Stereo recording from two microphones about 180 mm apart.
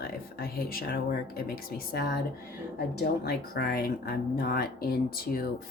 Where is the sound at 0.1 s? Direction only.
55° left (ahead or behind).